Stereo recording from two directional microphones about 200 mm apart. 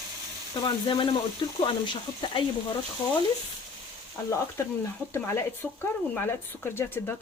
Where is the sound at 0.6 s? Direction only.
25° left (ahead or behind).